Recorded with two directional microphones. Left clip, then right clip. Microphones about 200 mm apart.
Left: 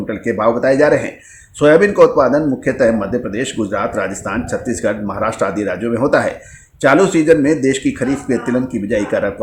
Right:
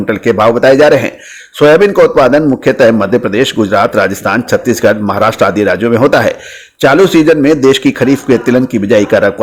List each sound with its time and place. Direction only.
0.1 s a man's voice: 35° right (ahead or behind)